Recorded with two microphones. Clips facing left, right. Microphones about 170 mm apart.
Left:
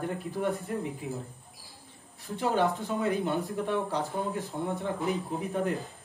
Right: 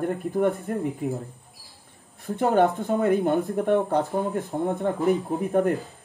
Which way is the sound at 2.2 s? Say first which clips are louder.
Right 7 dB; 55° right (ahead or behind).